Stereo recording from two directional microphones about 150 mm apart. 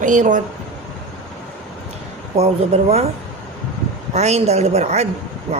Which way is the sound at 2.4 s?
45° right (ahead or behind).